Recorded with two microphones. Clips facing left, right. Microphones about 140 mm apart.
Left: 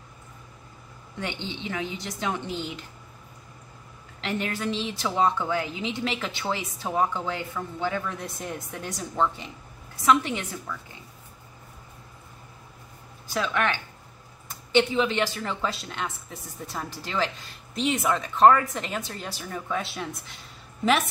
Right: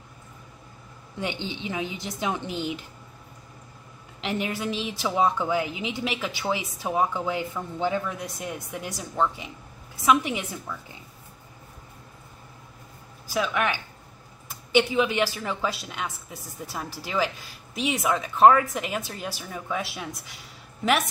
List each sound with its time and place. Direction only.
1.2 s a woman's voice: 15° right (ahead or behind)
4.2 s a woman's voice: 15° right (ahead or behind)
13.3 s a woman's voice: 5° right (ahead or behind)